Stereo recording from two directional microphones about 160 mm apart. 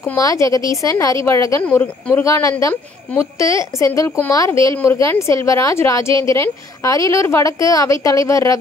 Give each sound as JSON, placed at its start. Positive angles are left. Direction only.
{"t": 0.0, "sound": "speech", "side_deg": 20}